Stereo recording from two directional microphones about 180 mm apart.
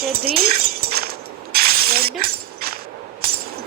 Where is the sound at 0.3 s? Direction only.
55° right (ahead or behind).